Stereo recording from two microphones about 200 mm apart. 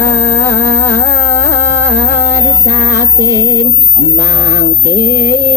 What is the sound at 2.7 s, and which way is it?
Music, 15° right (ahead or behind).